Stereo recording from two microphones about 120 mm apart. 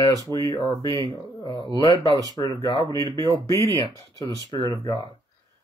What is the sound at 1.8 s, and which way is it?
Speech, 35° left (ahead or behind).